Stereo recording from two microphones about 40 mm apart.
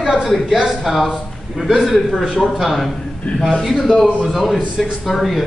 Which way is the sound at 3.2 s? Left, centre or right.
Left.